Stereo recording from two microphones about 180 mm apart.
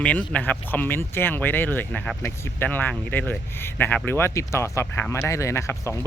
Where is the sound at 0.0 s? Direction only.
10° left (ahead or behind).